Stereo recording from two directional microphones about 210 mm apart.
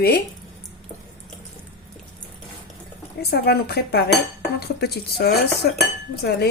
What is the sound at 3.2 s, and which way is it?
Speech, 50° left (ahead or behind).